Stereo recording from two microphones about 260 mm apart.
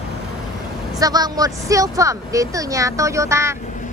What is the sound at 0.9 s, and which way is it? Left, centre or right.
A woman's voice, centre.